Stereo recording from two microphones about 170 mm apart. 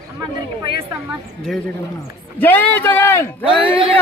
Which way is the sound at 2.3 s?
10° left (ahead or behind).